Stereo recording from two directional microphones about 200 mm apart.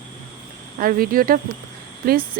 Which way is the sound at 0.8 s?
45° right (ahead or behind).